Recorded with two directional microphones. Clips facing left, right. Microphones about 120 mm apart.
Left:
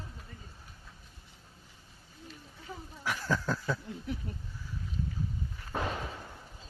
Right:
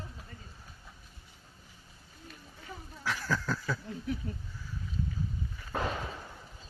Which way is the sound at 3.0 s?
15° left (ahead or behind).